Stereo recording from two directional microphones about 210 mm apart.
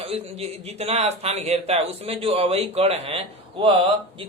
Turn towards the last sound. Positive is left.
turn(degrees=-25)  # may be behind; listen again after turning